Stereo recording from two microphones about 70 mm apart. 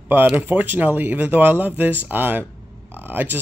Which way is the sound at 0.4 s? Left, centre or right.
Right.